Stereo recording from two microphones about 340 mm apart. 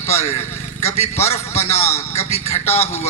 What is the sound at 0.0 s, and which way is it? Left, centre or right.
Speech, centre.